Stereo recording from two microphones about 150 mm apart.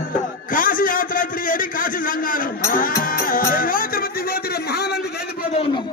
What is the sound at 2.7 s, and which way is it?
Music, 70° left (ahead or behind).